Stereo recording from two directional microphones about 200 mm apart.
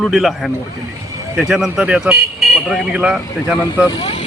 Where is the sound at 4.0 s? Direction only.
25° left (ahead or behind).